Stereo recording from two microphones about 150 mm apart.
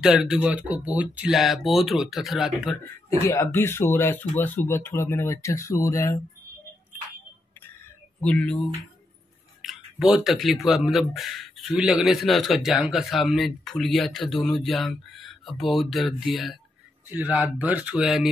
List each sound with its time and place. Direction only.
0.0 s speech: 5° right (ahead or behind)
3.3 s speech: 15° left (ahead or behind)
8.2 s speech: 10° left (ahead or behind)
9.6 s speech: centre (ahead or behind)
17.1 s speech: 10° right (ahead or behind)